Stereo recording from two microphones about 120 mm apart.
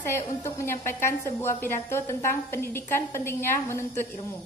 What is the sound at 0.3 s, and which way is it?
A woman's voice, 25° left (ahead or behind).